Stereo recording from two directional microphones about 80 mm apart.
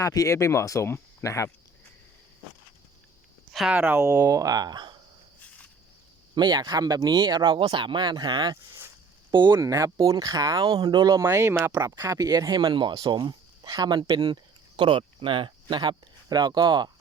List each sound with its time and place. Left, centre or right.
0.0 s speech: left
3.7 s speech: right
6.3 s speech: right
9.6 s speech: right
11.7 s speech: right
14.8 s speech: right
15.7 s speech: right